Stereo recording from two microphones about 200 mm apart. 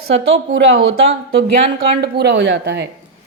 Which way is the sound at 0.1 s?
60° right (ahead or behind).